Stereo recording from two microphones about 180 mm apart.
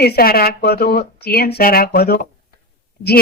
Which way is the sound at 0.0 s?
60° left (ahead or behind).